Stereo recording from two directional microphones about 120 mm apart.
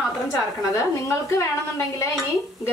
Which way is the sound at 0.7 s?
25° left (ahead or behind).